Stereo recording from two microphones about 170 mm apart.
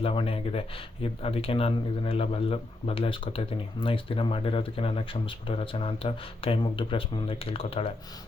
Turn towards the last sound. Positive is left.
turn(degrees=35)  # may be behind; listen again after turning